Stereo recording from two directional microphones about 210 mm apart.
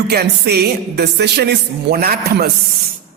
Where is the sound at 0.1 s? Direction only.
50° right (ahead or behind).